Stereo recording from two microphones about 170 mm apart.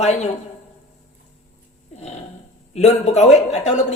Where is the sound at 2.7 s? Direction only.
40° left (ahead or behind).